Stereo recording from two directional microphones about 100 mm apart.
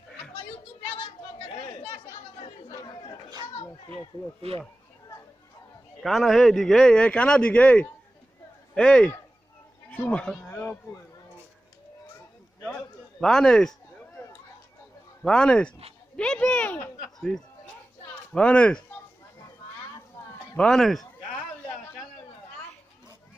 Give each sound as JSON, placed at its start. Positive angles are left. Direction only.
{"t": 0.8, "sound": "a sound", "side_deg": 65}
{"t": 1.6, "sound": "chatter", "side_deg": 65}
{"t": 2.7, "sound": "chatter", "side_deg": 45}
{"t": 4.4, "sound": "speech", "side_deg": -90}
{"t": 6.0, "sound": "a man's voice", "side_deg": 0}
{"t": 13.2, "sound": "a sound", "side_deg": 5}
{"t": 15.2, "sound": "a man's voice", "side_deg": 10}
{"t": 20.5, "sound": "speech", "side_deg": 5}